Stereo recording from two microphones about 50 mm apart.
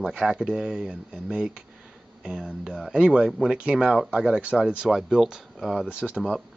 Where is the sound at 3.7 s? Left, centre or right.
Centre.